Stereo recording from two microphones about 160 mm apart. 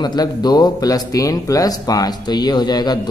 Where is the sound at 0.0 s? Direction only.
25° left (ahead or behind).